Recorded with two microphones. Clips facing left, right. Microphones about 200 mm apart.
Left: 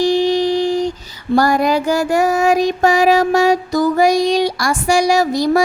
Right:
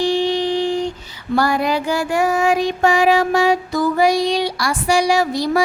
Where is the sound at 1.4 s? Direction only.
45° left (ahead or behind).